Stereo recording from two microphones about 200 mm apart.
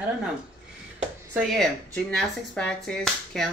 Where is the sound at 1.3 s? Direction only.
Centre (ahead or behind).